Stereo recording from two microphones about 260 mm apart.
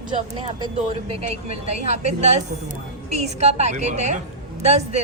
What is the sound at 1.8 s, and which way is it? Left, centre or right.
Speech, right.